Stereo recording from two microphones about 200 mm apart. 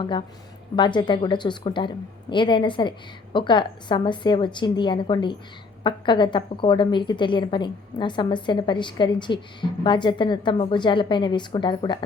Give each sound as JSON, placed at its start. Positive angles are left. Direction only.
{"t": 0.0, "sound": "a woman's voice", "side_deg": 25}